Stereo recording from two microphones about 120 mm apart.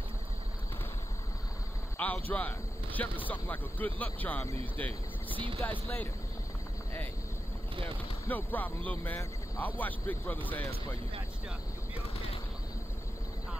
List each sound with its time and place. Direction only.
2.0 s speech: 15° left (ahead or behind)
8.3 s speech: 15° left (ahead or behind)
11.9 s machine gun: 55° left (ahead or behind)